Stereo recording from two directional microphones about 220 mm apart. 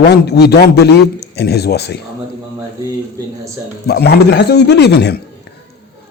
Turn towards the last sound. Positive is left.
turn(degrees=50)  # may be behind; listen again after turning